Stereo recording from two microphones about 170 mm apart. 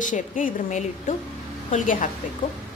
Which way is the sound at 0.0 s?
50° left (ahead or behind).